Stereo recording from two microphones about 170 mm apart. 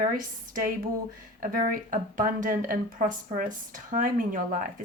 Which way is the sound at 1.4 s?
55° right (ahead or behind).